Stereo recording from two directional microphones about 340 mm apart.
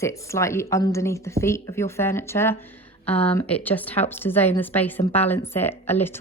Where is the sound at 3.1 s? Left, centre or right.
Centre.